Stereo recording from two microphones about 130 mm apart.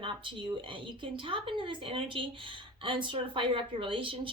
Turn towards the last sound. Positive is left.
turn(degrees=-40)  # may be behind; listen again after turning